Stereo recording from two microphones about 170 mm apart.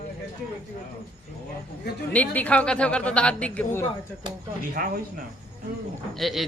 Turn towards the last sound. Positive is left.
turn(degrees=0)  # may be behind; listen again after turning